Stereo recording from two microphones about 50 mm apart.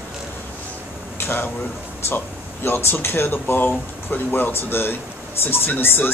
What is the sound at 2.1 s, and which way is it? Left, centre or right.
Speech, left.